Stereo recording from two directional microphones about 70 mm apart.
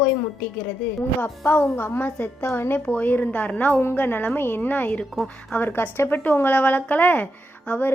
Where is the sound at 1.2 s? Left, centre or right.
Left.